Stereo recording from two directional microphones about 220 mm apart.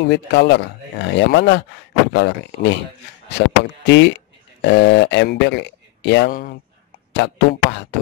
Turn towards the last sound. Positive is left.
turn(degrees=50)  # may be behind; listen again after turning